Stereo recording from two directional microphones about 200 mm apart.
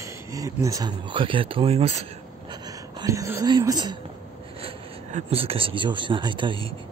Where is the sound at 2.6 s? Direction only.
20° right (ahead or behind).